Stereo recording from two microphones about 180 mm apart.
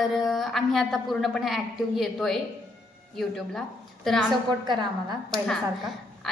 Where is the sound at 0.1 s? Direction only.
Centre (ahead or behind).